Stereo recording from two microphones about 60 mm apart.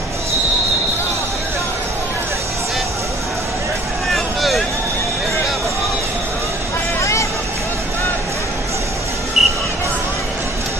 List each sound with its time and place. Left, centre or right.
4.1 s vehicle: centre
7.0 s vehicle: left
9.4 s a sound: centre